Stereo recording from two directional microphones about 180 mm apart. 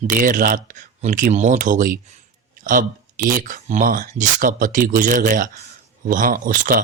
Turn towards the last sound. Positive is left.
turn(degrees=-45)  # may be behind; listen again after turning